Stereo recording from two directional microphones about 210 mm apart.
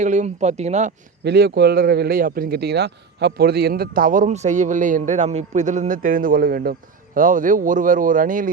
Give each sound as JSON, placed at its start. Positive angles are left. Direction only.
{"t": 0.0, "sound": "speech", "side_deg": -35}
{"t": 1.2, "sound": "speech", "side_deg": -50}